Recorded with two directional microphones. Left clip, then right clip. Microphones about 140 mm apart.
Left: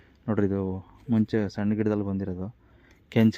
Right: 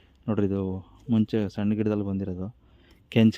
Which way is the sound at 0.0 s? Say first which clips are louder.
Left 1 dB; 10° right (ahead or behind).